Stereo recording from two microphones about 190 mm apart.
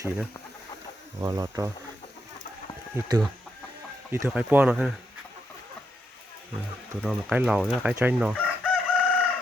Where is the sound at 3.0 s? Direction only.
15° right (ahead or behind).